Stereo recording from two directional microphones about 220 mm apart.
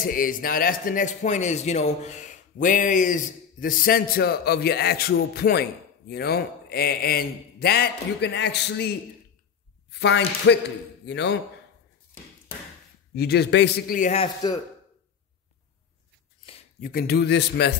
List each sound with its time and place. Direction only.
0.0 s a man's voice: 40° left (ahead or behind)
13.1 s a man's voice: 45° left (ahead or behind); by 14.6 s 20° left (ahead or behind)
16.8 s a man's voice: 45° left (ahead or behind)